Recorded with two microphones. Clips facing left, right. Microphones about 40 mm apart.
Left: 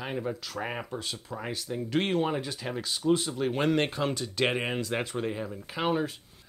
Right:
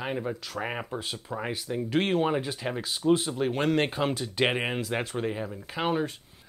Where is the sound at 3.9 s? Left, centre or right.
Centre.